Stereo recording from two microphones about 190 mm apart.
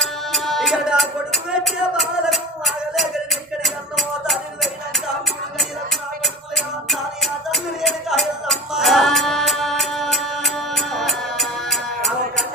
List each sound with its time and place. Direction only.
0.0 s music: centre (ahead or behind)
6.2 s music: centre (ahead or behind)